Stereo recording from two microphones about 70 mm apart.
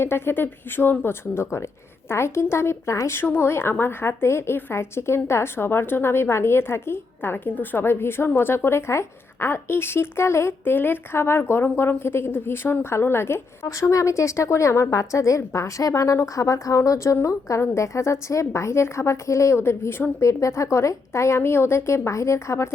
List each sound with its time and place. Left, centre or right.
0.0 s a woman's voice: left
3.2 s a woman's voice: left
13.7 s a woman's voice: left